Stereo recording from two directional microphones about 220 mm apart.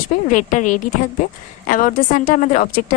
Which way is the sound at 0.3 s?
35° left (ahead or behind).